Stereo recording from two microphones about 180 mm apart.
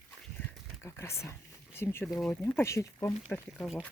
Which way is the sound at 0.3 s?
15° left (ahead or behind).